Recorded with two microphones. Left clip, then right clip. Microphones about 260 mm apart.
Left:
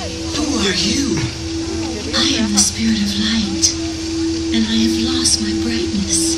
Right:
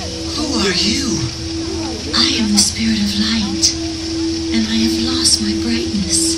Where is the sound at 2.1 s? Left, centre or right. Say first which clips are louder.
Right 2 dB; centre.